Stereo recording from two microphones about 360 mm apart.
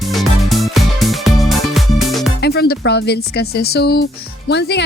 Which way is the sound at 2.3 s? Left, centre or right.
Left.